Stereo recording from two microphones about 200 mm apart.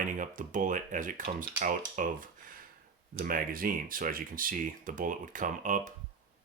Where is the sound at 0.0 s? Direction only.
40° right (ahead or behind).